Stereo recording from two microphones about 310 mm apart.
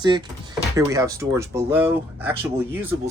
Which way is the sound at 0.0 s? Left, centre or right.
Centre.